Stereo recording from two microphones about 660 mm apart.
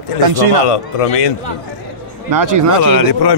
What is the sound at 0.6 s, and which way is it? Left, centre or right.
Speech, left.